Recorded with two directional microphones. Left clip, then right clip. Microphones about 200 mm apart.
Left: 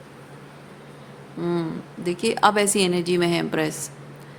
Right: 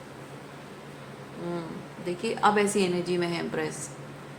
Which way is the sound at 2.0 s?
65° left (ahead or behind).